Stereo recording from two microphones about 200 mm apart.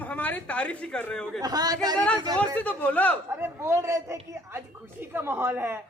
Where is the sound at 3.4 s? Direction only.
15° right (ahead or behind).